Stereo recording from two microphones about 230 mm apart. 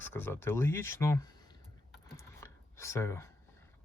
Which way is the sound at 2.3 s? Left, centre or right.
Centre.